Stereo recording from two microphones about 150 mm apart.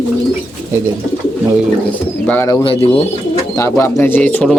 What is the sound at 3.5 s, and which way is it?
A man's voice, 20° left (ahead or behind).